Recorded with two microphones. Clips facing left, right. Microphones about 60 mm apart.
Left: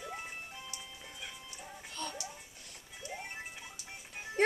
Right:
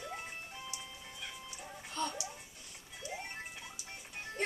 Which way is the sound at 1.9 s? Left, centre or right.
Centre.